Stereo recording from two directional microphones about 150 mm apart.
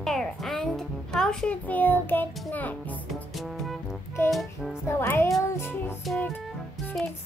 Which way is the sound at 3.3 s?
Centre (ahead or behind).